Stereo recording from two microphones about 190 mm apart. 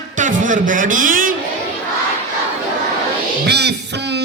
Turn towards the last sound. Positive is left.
turn(degrees=-60)  # may be behind; listen again after turning